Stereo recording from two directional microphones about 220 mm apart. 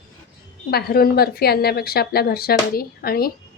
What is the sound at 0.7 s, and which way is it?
A woman's voice, 45° left (ahead or behind).